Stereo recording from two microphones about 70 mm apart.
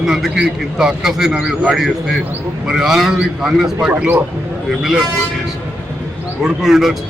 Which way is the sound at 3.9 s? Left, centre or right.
Right.